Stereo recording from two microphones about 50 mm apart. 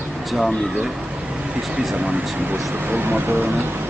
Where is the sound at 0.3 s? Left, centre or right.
Centre.